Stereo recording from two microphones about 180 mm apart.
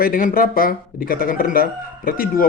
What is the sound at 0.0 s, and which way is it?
A man's voice, 50° left (ahead or behind).